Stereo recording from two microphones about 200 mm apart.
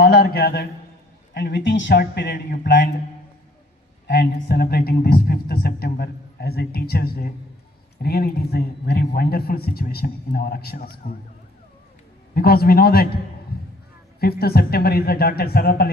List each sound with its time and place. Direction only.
0.0 s a man's voice: 55° left (ahead or behind)
4.0 s a man's voice: 50° left (ahead or behind)
12.3 s a man's voice: 50° left (ahead or behind)
14.2 s a man's voice: 50° left (ahead or behind)